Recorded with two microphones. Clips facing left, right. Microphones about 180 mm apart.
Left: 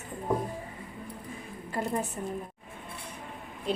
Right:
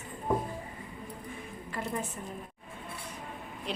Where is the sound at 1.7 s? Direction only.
40° left (ahead or behind).